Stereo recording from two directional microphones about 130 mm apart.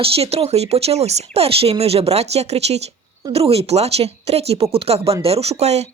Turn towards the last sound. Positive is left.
turn(degrees=-55)  # may be behind; listen again after turning